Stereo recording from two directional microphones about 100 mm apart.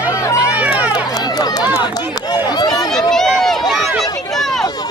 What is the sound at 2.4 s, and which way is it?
Run, 45° left (ahead or behind).